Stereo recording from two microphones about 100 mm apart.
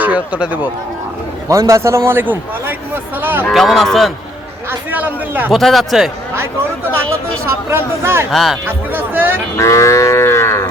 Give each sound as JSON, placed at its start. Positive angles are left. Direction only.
{"t": 0.0, "sound": "a man's voice", "side_deg": -15}
{"t": 1.5, "sound": "a man's voice", "side_deg": -30}
{"t": 3.5, "sound": "a man's voice", "side_deg": 0}
{"t": 4.9, "sound": "a man's voice", "side_deg": -15}
{"t": 5.5, "sound": "a man's voice", "side_deg": 0}
{"t": 7.7, "sound": "speech", "side_deg": -25}
{"t": 8.3, "sound": "a man's voice", "side_deg": 0}
{"t": 8.6, "sound": "speech", "side_deg": -20}
{"t": 9.6, "sound": "livestock", "side_deg": 30}